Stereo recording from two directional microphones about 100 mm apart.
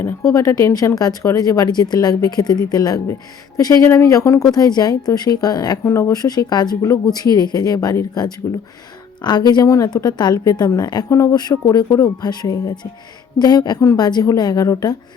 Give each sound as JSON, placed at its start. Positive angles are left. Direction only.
{"t": 0.3, "sound": "a woman's voice", "side_deg": 35}
{"t": 5.8, "sound": "a woman's voice", "side_deg": 30}